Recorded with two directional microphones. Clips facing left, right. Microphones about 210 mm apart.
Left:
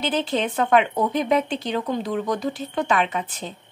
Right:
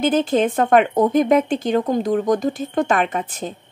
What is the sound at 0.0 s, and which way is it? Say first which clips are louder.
Speech: right 6 dB; 50° right (ahead or behind).